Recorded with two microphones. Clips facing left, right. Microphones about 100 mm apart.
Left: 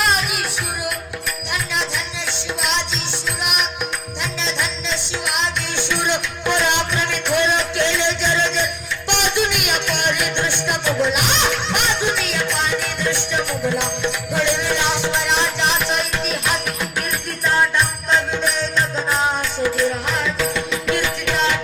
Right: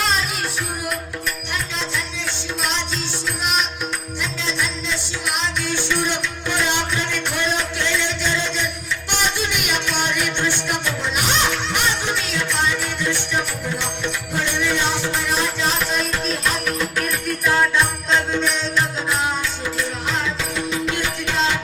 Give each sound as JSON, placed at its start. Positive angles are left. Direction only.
{"t": 0.1, "sound": "music", "side_deg": 70}
{"t": 4.2, "sound": "music", "side_deg": 65}
{"t": 20.7, "sound": "music", "side_deg": 60}